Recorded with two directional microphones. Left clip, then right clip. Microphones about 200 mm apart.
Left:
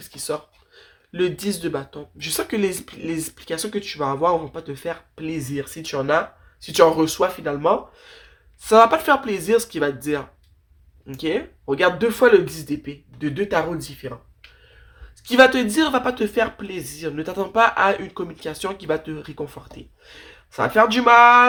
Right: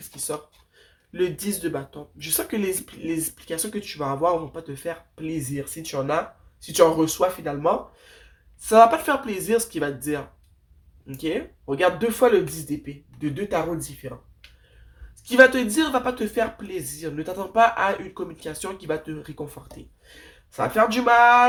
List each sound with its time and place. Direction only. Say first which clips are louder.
1.1 s speech: left 3 dB; 25° left (ahead or behind)
15.2 s speech: left 1 dB; 35° left (ahead or behind)